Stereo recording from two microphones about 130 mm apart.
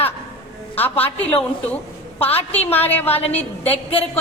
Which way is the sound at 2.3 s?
15° left (ahead or behind).